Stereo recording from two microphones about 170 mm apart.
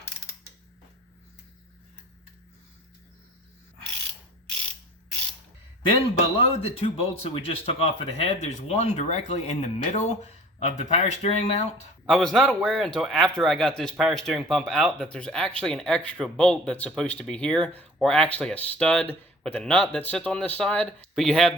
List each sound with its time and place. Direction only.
6.3 s speech: 35° left (ahead or behind)
12.0 s speech: 5° left (ahead or behind)